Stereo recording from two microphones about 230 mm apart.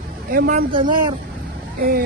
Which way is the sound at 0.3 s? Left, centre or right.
Right.